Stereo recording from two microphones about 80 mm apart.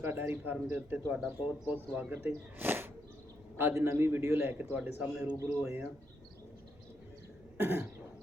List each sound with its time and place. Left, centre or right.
0.0 s a man's voice: right
5.4 s a man's voice: right
7.6 s speech: right